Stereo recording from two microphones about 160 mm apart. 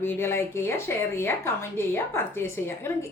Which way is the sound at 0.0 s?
15° left (ahead or behind).